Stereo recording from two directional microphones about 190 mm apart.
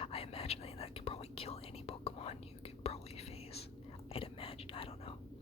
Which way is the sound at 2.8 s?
30° left (ahead or behind).